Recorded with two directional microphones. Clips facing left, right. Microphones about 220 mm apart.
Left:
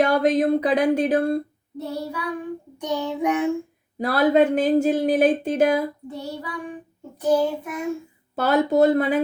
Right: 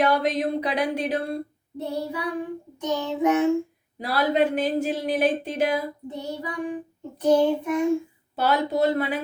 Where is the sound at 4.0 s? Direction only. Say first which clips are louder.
Left 5 dB; 45° left (ahead or behind).